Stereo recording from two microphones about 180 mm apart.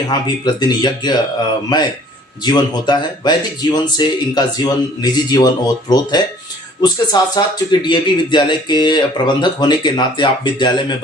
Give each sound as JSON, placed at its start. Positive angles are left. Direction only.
{"t": 0.1, "sound": "speech", "side_deg": 25}
{"t": 2.4, "sound": "speech", "side_deg": 25}